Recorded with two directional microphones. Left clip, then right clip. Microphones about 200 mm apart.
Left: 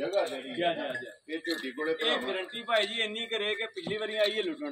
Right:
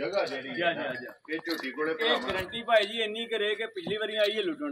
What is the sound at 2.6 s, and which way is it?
A man's voice, 35° right (ahead or behind).